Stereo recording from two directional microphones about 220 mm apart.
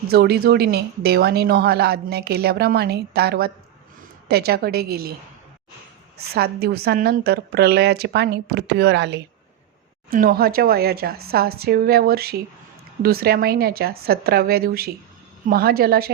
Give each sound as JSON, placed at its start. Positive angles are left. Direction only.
{"t": 0.1, "sound": "a woman's voice", "side_deg": -45}
{"t": 6.1, "sound": "a woman's voice", "side_deg": -45}